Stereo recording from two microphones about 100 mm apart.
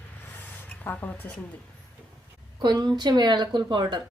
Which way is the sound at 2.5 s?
45° right (ahead or behind).